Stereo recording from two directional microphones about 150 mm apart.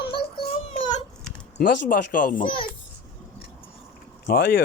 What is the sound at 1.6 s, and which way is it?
Speech, 75° left (ahead or behind).